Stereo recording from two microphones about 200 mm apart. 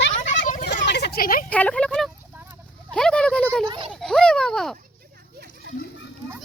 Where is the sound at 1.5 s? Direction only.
5° left (ahead or behind).